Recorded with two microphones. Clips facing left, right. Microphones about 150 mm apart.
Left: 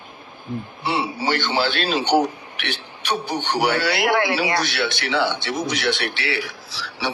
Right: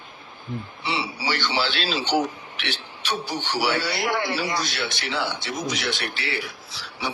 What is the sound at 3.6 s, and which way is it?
Speech, 65° left (ahead or behind).